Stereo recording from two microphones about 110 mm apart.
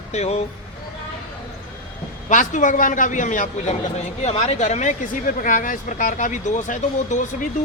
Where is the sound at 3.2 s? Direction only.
90° left.